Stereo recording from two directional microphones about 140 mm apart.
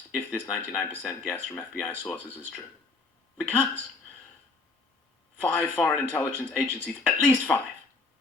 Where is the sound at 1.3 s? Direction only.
20° left (ahead or behind).